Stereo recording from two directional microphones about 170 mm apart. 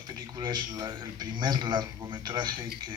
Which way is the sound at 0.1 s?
25° right (ahead or behind).